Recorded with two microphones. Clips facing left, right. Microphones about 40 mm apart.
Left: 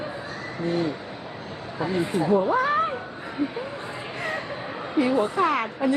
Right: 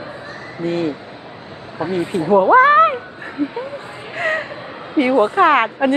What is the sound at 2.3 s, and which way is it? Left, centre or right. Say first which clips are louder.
Speech: right 14 dB; right.